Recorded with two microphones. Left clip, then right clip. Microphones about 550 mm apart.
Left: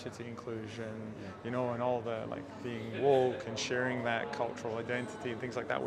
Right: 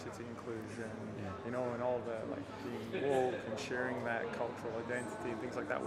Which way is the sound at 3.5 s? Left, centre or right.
Left.